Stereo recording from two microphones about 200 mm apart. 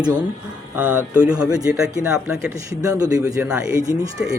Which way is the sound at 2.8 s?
15° right (ahead or behind).